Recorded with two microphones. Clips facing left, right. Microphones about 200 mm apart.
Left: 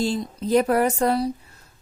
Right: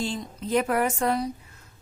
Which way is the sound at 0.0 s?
35° left (ahead or behind).